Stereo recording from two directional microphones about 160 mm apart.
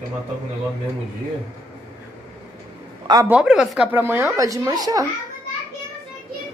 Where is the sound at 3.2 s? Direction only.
5° right (ahead or behind); by 5.1 s 20° right (ahead or behind).